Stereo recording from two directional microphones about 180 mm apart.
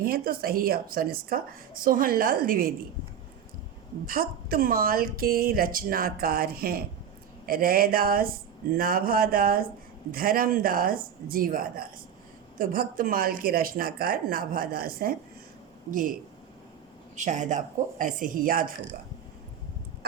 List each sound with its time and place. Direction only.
0.0 s speech: 55° right (ahead or behind)
4.0 s speech: 55° right (ahead or behind)
17.2 s speech: 45° right (ahead or behind)